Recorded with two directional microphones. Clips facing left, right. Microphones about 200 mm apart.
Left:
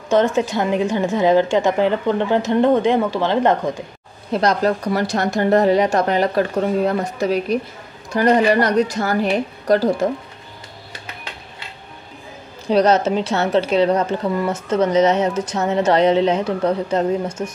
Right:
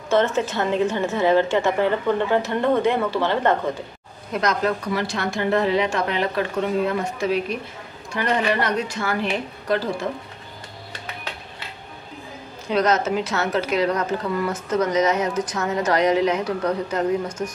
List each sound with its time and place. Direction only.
0.1 s a woman's voice: 15° left (ahead or behind)
4.3 s speech: 35° left (ahead or behind)
12.6 s a woman's voice: 35° left (ahead or behind)